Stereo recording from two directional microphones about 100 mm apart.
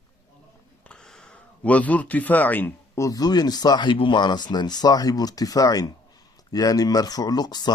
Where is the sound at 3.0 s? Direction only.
40° left (ahead or behind).